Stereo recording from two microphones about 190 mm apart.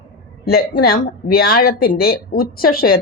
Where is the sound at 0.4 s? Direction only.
55° left (ahead or behind).